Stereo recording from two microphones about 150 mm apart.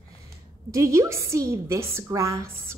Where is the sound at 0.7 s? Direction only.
20° right (ahead or behind).